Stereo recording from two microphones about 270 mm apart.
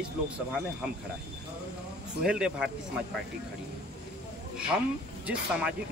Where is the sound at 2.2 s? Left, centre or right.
Centre.